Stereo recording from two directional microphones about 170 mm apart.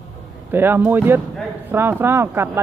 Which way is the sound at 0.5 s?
10° right (ahead or behind).